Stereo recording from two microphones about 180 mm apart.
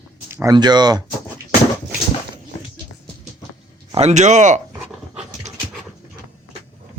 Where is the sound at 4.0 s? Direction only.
40° right (ahead or behind).